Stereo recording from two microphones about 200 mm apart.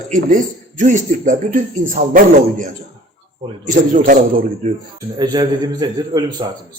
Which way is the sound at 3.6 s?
40° right (ahead or behind).